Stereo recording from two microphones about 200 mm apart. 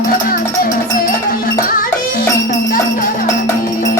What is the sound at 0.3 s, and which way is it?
Music, 45° left (ahead or behind).